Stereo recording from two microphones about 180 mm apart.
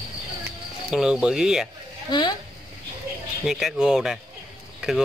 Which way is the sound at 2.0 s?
25° left (ahead or behind).